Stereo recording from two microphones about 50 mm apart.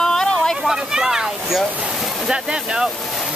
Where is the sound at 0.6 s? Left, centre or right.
Centre.